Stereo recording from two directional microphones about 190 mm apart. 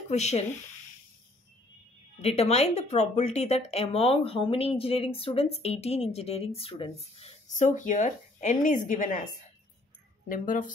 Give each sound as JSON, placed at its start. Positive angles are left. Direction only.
{"t": 0.1, "sound": "speech", "side_deg": 35}
{"t": 2.2, "sound": "speech", "side_deg": 35}